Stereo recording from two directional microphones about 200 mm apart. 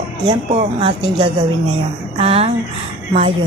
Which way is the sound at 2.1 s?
30° right (ahead or behind).